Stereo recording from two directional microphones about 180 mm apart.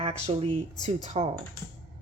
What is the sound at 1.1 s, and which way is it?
Speech, 35° right (ahead or behind).